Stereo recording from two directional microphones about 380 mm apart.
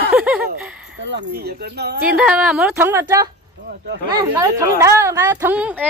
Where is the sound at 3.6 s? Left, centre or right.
Right.